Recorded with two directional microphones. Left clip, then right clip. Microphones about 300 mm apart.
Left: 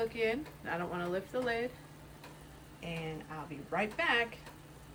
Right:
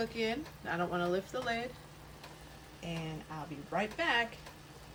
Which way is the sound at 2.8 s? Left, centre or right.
Centre.